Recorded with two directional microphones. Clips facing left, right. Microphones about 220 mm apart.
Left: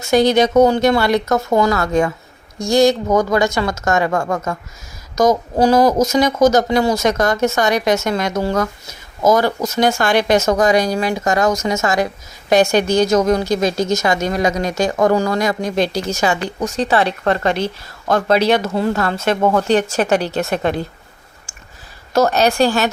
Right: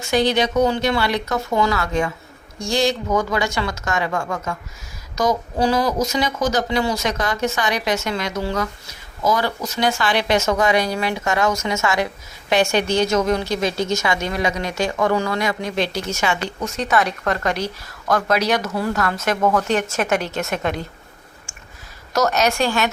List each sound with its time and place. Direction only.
0.1 s speech: 45° left (ahead or behind)
22.1 s speech: 30° left (ahead or behind)